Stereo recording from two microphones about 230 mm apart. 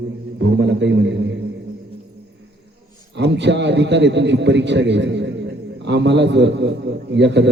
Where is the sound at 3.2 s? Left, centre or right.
Right.